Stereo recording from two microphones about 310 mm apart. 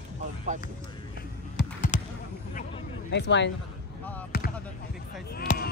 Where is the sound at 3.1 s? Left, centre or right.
Left.